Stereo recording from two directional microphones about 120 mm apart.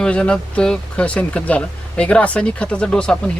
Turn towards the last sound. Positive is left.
turn(degrees=5)  # may be behind; listen again after turning